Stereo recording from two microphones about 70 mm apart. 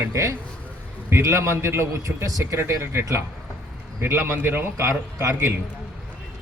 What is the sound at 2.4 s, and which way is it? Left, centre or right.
A man's voice, right.